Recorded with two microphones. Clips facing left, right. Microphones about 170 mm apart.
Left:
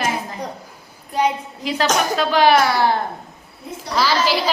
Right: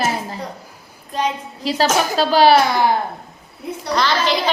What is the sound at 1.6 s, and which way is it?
Speech, 30° right (ahead or behind).